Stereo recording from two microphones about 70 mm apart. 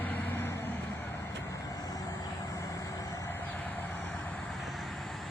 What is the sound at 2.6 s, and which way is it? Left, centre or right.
Vehicle, left.